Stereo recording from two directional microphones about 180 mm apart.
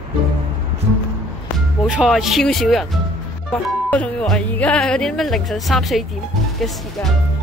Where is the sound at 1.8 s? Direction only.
5° right (ahead or behind).